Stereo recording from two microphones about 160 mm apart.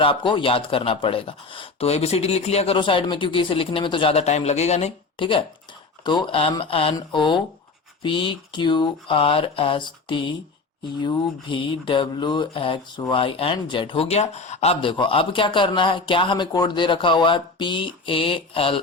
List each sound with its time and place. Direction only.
0.0 s speech: 30° left (ahead or behind)
5.1 s speech: 30° left (ahead or behind)